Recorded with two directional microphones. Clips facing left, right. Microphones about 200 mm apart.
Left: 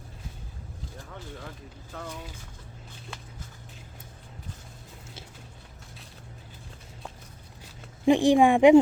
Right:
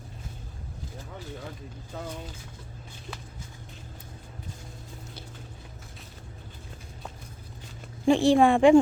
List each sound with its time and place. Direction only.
8.0 s speech: 15° left (ahead or behind)